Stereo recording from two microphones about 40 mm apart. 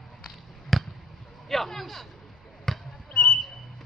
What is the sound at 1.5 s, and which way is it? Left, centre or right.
Speech, centre.